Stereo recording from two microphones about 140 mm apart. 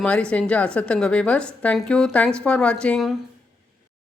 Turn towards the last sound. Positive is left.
turn(degrees=5)  # may be behind; listen again after turning